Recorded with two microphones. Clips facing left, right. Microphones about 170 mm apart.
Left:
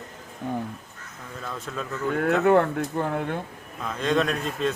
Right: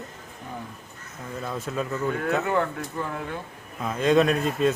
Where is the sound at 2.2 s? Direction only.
55° left (ahead or behind).